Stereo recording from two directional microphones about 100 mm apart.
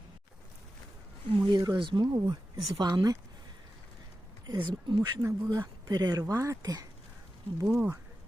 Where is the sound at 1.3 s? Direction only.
45° right (ahead or behind).